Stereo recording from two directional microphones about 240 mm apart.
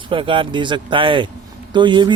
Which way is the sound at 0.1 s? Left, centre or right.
Right.